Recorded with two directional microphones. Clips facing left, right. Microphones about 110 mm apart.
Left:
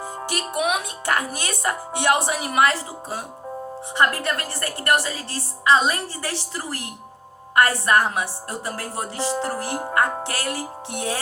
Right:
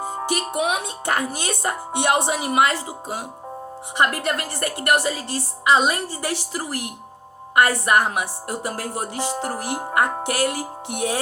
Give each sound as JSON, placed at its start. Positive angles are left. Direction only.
{"t": 0.3, "sound": "a woman's voice", "side_deg": -25}